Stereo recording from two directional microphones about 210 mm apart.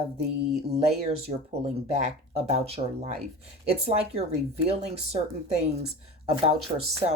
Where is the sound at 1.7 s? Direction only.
30° right (ahead or behind).